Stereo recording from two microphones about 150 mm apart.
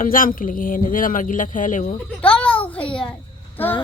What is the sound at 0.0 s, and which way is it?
Speech, 65° left (ahead or behind).